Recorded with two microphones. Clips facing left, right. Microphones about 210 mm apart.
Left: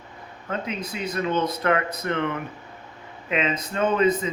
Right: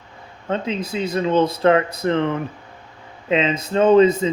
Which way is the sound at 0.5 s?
30° right (ahead or behind).